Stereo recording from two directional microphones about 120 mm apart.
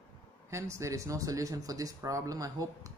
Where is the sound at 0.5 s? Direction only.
25° right (ahead or behind).